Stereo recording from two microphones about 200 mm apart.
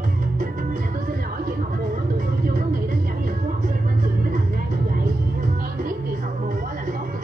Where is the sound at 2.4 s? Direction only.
45° right (ahead or behind).